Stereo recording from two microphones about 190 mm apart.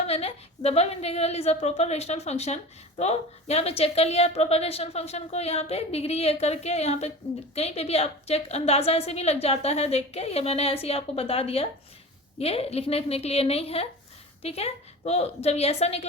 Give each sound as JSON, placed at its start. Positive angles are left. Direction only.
{"t": 0.0, "sound": "a woman's voice", "side_deg": 30}